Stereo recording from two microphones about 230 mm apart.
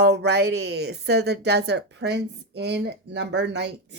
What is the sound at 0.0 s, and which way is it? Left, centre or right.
A woman's voice, right.